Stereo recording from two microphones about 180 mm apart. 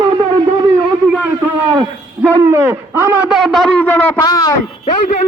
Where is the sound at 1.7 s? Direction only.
20° right (ahead or behind).